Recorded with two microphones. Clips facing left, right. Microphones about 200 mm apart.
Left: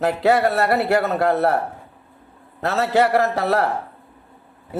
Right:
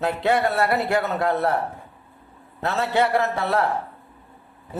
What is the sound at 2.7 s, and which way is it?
Speech, 45° left (ahead or behind).